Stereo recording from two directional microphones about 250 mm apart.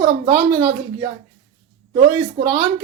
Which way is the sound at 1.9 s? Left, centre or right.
Centre.